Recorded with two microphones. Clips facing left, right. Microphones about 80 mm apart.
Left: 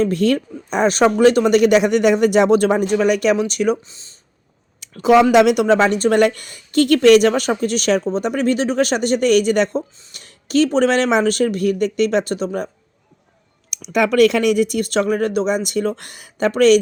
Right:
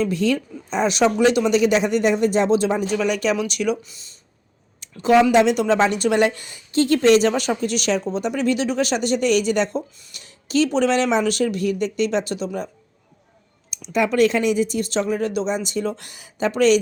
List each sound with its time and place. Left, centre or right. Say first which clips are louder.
0.0 s a woman's voice: left 4 dB; left
3.8 s speech: left 1 dB; left
4.8 s a sound: left 3 dB; left
5.3 s speech: left 4 dB; left
5.6 s a woman's voice: left 4 dB; left
13.7 s speech: left 3 dB; left